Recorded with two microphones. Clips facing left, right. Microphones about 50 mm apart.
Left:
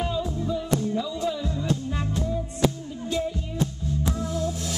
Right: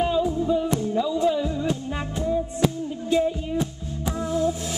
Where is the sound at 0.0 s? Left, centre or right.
Centre.